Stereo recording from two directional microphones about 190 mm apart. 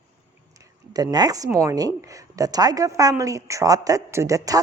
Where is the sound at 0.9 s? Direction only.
20° right (ahead or behind).